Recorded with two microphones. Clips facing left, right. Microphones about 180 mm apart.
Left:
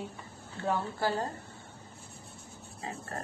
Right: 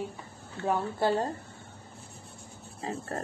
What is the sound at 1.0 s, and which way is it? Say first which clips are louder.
Speech: right 6 dB; 25° right (ahead or behind).